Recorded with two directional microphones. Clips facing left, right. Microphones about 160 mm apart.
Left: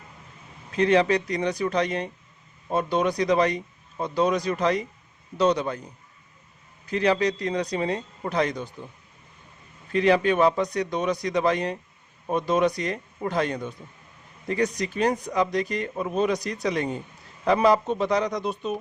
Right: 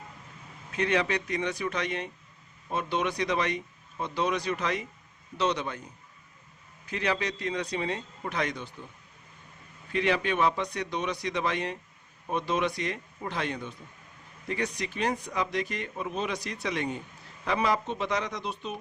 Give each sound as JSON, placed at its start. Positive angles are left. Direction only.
{"t": 0.8, "sound": "speech", "side_deg": 35}
{"t": 6.8, "sound": "speech", "side_deg": 35}
{"t": 9.9, "sound": "speech", "side_deg": 40}